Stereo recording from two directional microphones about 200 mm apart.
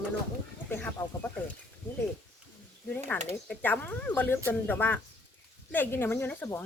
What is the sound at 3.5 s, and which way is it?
Speech, 10° left (ahead or behind).